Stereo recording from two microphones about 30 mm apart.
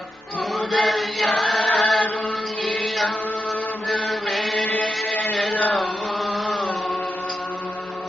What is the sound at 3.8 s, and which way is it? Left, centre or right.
Chant, centre.